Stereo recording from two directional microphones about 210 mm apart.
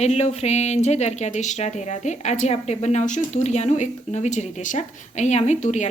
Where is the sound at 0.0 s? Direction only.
30° left (ahead or behind).